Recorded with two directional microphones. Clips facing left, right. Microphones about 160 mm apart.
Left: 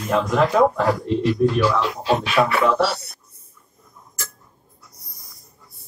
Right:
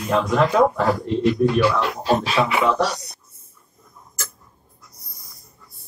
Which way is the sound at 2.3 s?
20° right (ahead or behind).